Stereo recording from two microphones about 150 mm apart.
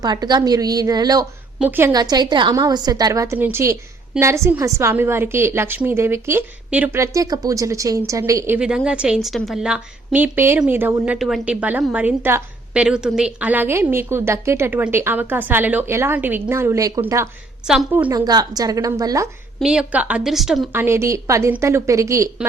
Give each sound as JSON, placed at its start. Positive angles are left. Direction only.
{"t": 0.0, "sound": "a woman's voice", "side_deg": -25}
{"t": 1.5, "sound": "a woman's voice", "side_deg": -10}
{"t": 1.9, "sound": "a woman's voice", "side_deg": -25}
{"t": 8.5, "sound": "a woman's voice", "side_deg": -5}
{"t": 18.1, "sound": "a woman's voice", "side_deg": -25}
{"t": 19.5, "sound": "a woman's voice", "side_deg": -5}
{"t": 20.7, "sound": "a woman's voice", "side_deg": -15}